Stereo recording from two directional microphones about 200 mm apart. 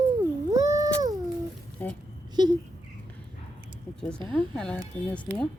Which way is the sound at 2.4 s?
20° right (ahead or behind).